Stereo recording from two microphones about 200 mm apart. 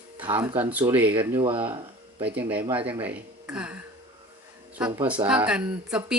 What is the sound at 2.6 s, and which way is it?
Speech, 25° right (ahead or behind).